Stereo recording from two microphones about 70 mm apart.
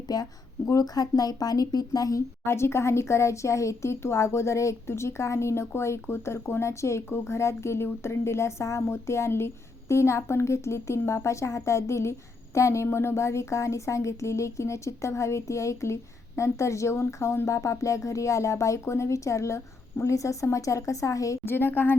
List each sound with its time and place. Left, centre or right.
0.1 s a woman's voice: left
2.4 s a woman's voice: left
21.4 s speech: left